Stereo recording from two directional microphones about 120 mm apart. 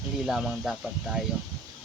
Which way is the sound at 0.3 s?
5° right (ahead or behind).